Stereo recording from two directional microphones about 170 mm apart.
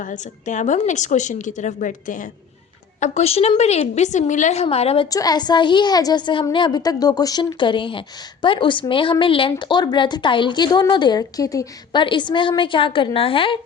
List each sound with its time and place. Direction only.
0.0 s a woman's voice: 50° left (ahead or behind)
3.0 s a woman's voice: 40° left (ahead or behind)
5.1 s a woman's voice: 25° left (ahead or behind)